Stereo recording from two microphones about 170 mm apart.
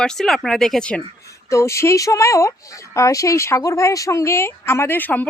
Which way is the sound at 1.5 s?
15° left (ahead or behind).